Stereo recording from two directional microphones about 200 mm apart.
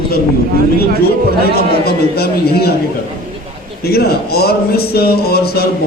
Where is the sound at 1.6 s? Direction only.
50° left (ahead or behind).